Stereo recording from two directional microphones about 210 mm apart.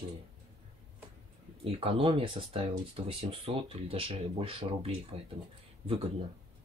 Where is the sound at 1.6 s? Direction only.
25° right (ahead or behind).